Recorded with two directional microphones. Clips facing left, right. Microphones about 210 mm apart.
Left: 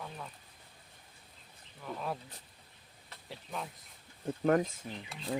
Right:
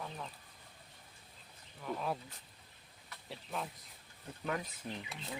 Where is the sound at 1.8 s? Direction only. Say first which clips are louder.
Right 1 dB; centre (ahead or behind).